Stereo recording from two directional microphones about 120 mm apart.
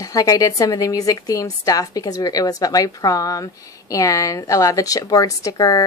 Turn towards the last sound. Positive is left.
turn(degrees=30)  # may be behind; listen again after turning